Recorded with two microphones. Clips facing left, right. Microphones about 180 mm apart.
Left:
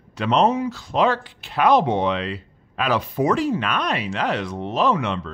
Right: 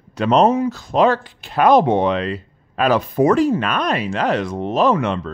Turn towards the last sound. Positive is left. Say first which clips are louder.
# right 4 dB
turn(degrees=-45)  # may be behind; listen again after turning